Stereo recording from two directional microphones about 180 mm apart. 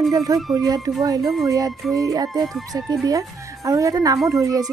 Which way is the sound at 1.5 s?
20° right (ahead or behind).